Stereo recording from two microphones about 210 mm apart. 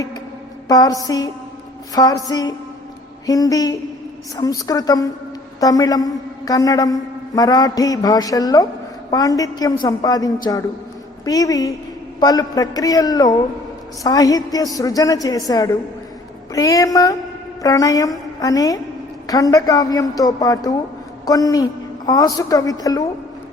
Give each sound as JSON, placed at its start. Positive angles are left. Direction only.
{"t": 0.7, "sound": "a man's voice", "side_deg": 15}